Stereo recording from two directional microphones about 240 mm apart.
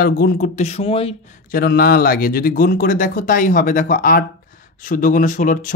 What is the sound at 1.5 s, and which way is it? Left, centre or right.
Speech, left.